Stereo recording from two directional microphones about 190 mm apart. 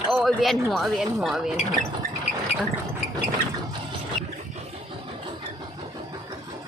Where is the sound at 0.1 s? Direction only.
Centre (ahead or behind).